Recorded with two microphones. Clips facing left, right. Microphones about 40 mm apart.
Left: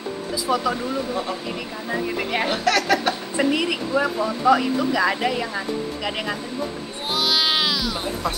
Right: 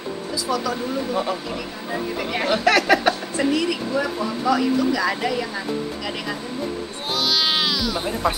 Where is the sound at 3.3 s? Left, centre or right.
Centre.